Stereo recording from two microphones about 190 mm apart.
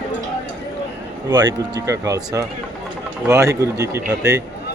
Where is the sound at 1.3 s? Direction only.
20° right (ahead or behind).